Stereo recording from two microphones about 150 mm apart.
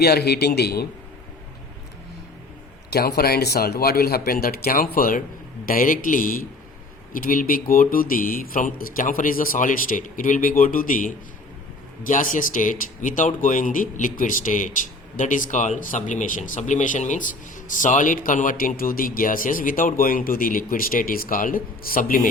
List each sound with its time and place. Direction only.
0.0 s speech: 90° left
3.2 s speech: 90° left; by 22.3 s 70° left (ahead or behind)